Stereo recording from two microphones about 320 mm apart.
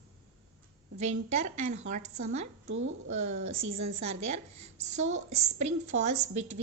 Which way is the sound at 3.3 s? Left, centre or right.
Centre.